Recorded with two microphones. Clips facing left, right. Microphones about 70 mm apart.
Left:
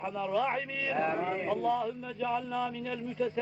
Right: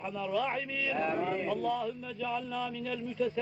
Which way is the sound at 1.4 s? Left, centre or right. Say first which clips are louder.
Left 2 dB; left.